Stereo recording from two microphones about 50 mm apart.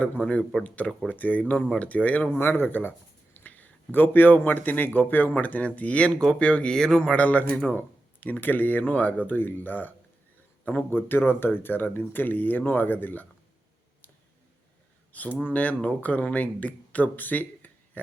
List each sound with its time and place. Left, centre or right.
1.0 s speech: left
2.4 s speech: left; by 7.1 s centre
7.1 s speech: left
15.1 s speech: left